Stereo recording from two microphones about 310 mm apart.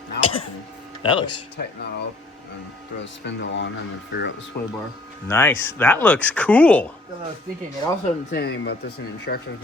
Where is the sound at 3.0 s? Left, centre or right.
Left.